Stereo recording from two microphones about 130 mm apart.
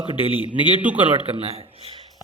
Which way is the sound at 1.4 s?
50° right (ahead or behind).